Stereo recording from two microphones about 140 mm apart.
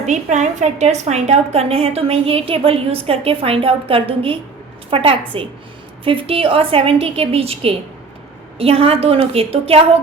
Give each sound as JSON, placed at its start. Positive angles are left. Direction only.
{"t": 0.0, "sound": "a woman's voice", "side_deg": -55}